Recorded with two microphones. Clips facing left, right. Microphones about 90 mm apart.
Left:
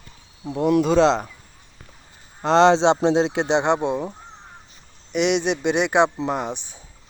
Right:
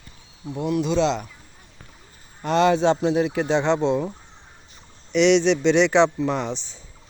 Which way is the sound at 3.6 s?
15° left (ahead or behind).